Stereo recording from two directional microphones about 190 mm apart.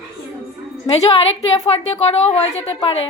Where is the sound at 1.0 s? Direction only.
30° left (ahead or behind).